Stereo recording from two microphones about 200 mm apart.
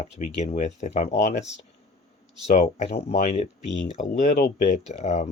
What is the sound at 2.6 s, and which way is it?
Speech, 35° left (ahead or behind).